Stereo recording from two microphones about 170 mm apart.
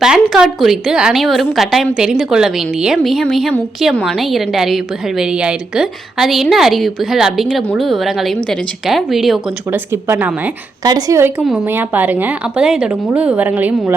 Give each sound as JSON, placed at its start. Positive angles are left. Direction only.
{"t": 0.0, "sound": "a woman's voice", "side_deg": -5}
{"t": 9.6, "sound": "a woman's voice", "side_deg": -15}
{"t": 10.8, "sound": "a woman's voice", "side_deg": -20}